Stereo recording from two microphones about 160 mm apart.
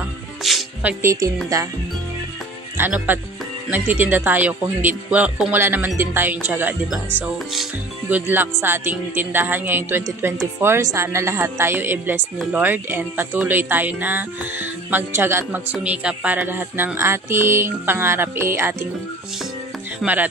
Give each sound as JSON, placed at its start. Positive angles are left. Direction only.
{"t": 0.4, "sound": "music", "side_deg": 0}
{"t": 1.0, "sound": "a woman's voice", "side_deg": -20}
{"t": 2.8, "sound": "speech", "side_deg": -10}
{"t": 8.1, "sound": "speech", "side_deg": -10}
{"t": 20.0, "sound": "speech", "side_deg": -10}